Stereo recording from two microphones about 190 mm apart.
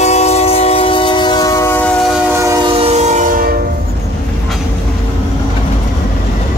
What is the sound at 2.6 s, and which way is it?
Train, 30° right (ahead or behind).